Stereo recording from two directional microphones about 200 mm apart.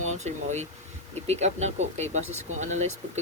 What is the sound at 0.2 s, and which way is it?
Speech, 35° right (ahead or behind).